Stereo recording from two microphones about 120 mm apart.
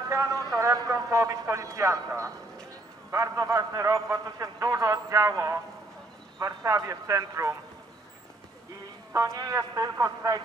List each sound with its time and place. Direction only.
0.1 s a sound: 25° right (ahead or behind)
3.1 s a man's voice: 25° right (ahead or behind)
9.1 s a man's voice: 25° right (ahead or behind)